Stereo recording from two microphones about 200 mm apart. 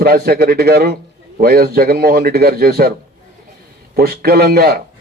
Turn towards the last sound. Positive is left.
turn(degrees=-50)  # may be behind; listen again after turning